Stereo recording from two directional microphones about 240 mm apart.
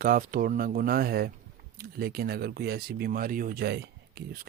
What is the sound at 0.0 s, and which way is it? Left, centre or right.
Speech, right.